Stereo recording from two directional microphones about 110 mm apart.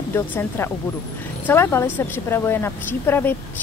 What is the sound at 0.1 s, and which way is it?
A woman's voice, 20° left (ahead or behind).